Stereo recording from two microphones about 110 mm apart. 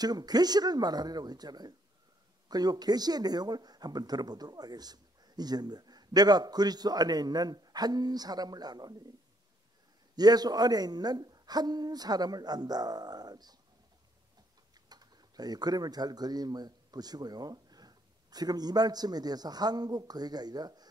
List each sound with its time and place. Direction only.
0.0 s speech: 35° right (ahead or behind)
10.1 s speech: 35° right (ahead or behind)
14.7 s speech: 35° right (ahead or behind)